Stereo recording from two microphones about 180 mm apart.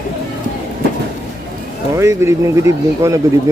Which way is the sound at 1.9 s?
15° right (ahead or behind).